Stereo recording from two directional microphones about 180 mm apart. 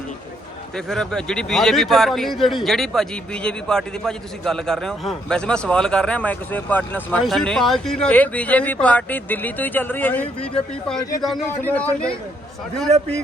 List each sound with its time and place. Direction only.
0.9 s a man's voice: 5° left (ahead or behind)